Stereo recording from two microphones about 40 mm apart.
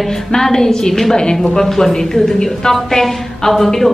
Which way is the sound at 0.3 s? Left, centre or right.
Centre.